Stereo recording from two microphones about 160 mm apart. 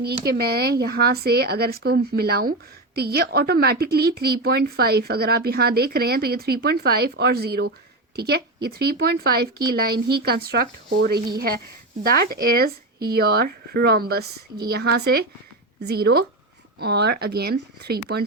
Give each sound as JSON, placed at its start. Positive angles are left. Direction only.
{"t": 0.1, "sound": "speech", "side_deg": -80}